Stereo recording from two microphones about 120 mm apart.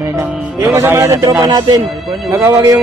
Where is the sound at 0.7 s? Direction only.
25° right (ahead or behind).